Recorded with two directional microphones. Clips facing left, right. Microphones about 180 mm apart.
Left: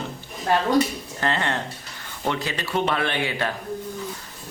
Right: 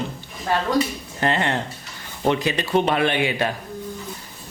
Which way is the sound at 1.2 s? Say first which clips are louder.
Right 3 dB; 20° right (ahead or behind).